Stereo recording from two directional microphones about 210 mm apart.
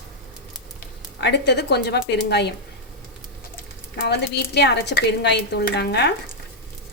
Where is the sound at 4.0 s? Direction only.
50° left (ahead or behind).